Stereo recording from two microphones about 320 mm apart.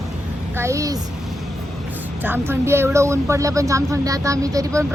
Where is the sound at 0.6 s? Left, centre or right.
Centre.